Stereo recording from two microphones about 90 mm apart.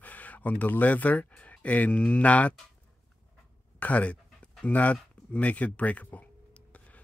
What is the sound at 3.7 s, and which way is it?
Speech, 15° left (ahead or behind).